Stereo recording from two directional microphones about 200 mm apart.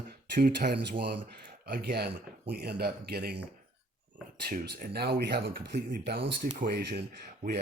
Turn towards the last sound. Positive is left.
turn(degrees=-40)  # may be behind; listen again after turning